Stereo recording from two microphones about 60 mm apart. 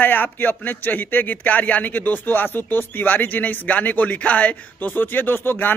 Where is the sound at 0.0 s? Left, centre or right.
Left.